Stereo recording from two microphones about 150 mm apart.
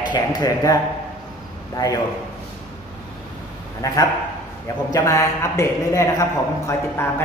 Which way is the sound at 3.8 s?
20° left (ahead or behind).